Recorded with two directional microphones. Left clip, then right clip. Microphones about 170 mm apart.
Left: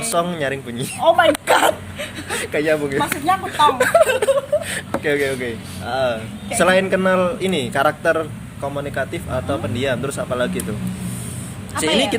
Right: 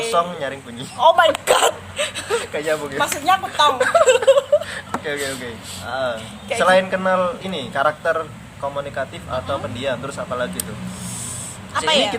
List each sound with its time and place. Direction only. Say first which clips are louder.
0.1 s speech: left 3 dB; 40° left (ahead or behind)
0.9 s speech: right 1 dB; 45° right (ahead or behind)
2.3 s speech: left 4 dB; 40° left (ahead or behind)
3.0 s speech: right 1 dB; 35° right (ahead or behind)
3.8 s a man's voice: left 1 dB; 40° left (ahead or behind)
4.6 s a sound: left 4 dB; 45° left (ahead or behind)
5.9 s a man's voice: left 3 dB; 40° left (ahead or behind)
11.9 s speech: right 1 dB; 40° right (ahead or behind)